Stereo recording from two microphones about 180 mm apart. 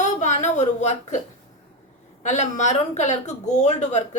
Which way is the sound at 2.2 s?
40° left (ahead or behind).